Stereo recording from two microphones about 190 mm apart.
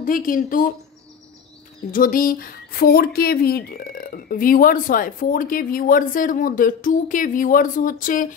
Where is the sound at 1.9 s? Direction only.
45° left (ahead or behind).